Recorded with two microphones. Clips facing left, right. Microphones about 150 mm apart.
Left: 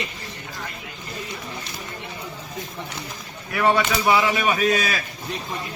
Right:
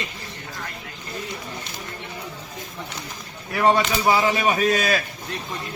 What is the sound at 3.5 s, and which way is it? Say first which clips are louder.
Speech: right 1 dB; 30° right (ahead or behind).